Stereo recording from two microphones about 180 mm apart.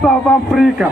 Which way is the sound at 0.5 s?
Centre (ahead or behind).